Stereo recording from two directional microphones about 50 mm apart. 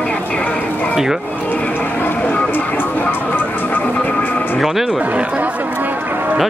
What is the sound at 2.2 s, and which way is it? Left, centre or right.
Vehicle, left.